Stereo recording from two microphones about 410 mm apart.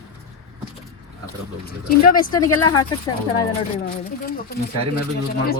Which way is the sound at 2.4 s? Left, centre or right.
Centre.